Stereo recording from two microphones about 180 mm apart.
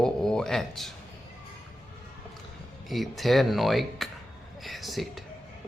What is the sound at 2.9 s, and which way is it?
Speech, centre (ahead or behind).